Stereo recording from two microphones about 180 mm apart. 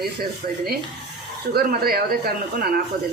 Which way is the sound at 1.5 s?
60° right (ahead or behind).